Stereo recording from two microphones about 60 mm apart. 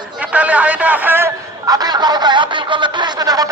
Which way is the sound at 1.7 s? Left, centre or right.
Right.